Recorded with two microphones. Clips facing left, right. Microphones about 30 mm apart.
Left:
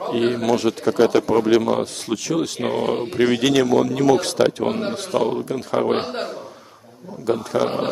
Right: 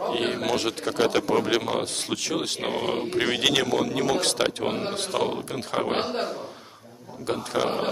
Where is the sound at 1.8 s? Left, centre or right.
Right.